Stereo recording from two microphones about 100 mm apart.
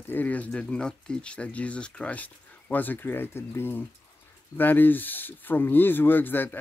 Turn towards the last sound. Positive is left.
turn(degrees=20)  # may be behind; listen again after turning